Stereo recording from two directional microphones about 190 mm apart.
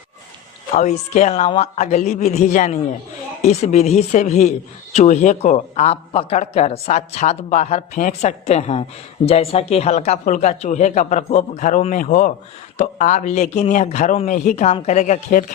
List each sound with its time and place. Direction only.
0.7 s a man's voice: 35° left (ahead or behind)